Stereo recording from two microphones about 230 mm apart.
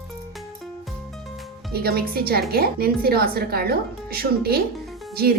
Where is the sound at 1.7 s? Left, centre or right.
Right.